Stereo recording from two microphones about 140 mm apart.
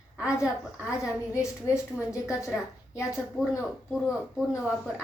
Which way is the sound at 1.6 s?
20° left (ahead or behind).